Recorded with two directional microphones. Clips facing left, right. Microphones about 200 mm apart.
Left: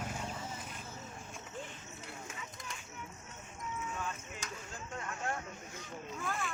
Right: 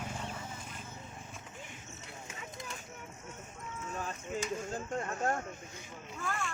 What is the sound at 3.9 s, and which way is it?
Clip-clop, 35° right (ahead or behind).